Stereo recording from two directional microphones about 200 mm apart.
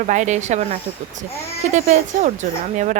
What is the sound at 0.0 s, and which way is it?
Speech, 35° right (ahead or behind).